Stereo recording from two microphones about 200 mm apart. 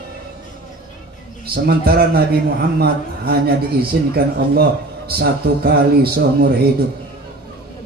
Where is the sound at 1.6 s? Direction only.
50° right (ahead or behind).